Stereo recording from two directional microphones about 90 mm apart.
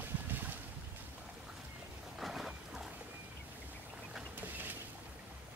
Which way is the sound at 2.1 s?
5° right (ahead or behind).